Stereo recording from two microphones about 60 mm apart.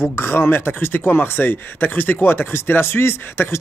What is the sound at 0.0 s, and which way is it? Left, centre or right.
A man's voice, left.